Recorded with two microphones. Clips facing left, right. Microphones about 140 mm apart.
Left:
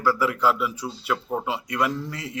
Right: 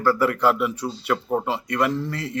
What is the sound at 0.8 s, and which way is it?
Speech, centre (ahead or behind).